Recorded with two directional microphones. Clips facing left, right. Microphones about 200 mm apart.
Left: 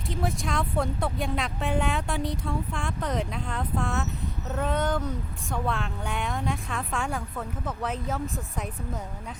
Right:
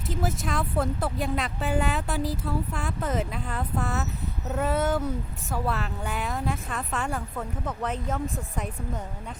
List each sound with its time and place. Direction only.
0.1 s speech: centre (ahead or behind)